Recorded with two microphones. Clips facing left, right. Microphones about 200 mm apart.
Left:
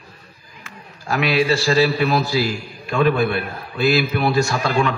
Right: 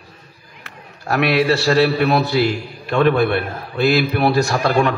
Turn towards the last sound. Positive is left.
turn(degrees=-55)  # may be behind; listen again after turning